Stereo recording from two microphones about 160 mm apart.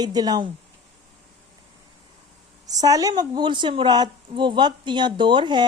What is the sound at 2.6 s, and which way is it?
A woman's voice, 20° right (ahead or behind).